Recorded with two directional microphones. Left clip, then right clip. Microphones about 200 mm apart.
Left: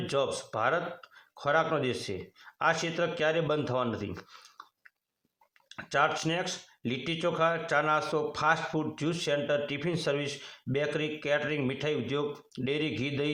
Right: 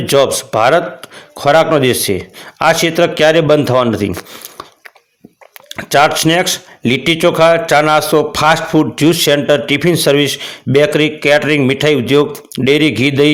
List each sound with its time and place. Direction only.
0.0 s speech: 35° right (ahead or behind)
5.6 s speech: 35° right (ahead or behind)